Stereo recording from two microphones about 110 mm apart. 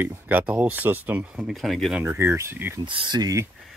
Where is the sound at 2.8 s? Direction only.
45° right (ahead or behind).